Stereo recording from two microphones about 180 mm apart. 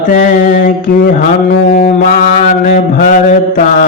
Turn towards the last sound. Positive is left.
turn(degrees=45)  # may be behind; listen again after turning